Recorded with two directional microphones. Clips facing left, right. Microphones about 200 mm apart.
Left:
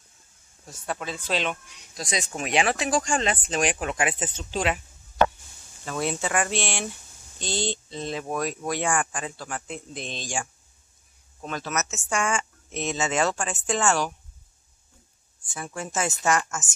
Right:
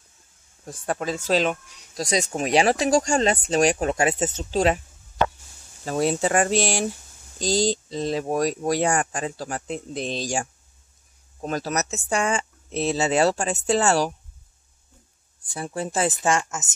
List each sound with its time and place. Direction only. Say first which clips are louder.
0.7 s speech: right 6 dB; 45° right (ahead or behind)
5.9 s speech: right 6 dB; 40° right (ahead or behind)
15.4 s speech: right 5 dB; 35° right (ahead or behind)